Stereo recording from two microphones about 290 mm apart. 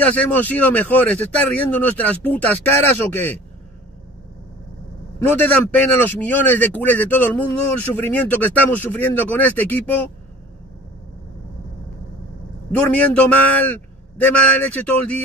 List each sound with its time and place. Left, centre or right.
0.0 s speech: centre
5.4 s speech: centre
12.7 s speech: centre